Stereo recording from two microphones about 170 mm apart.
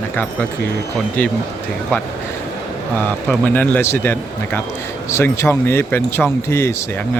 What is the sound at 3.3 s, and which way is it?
Speech, 10° left (ahead or behind).